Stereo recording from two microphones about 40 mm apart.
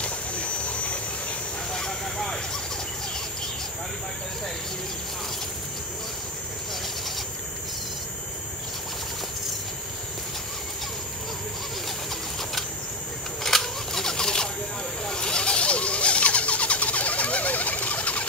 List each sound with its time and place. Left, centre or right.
0.0 s a sound: left
1.7 s vehicle: centre
13.4 s single-lens reflex camera: centre
15.0 s vehicle: centre; by 18.2 s left